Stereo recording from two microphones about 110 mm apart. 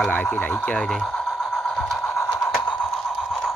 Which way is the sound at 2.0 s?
15° left (ahead or behind).